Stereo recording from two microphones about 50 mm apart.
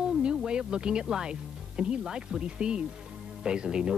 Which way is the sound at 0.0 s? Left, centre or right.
Centre.